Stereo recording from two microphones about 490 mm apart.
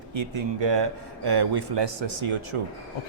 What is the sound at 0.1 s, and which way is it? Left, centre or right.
Speech, right.